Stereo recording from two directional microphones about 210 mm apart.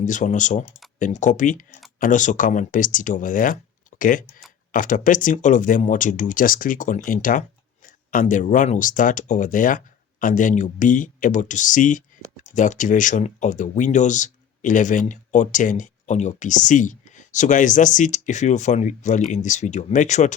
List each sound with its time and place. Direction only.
0.0 s speech: 35° left (ahead or behind)